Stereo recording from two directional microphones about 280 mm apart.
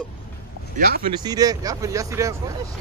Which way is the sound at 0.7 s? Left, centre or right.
Right.